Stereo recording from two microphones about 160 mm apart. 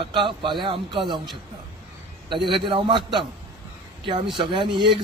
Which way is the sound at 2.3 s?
30° right (ahead or behind).